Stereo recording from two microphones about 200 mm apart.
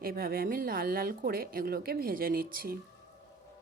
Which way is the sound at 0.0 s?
50° right (ahead or behind).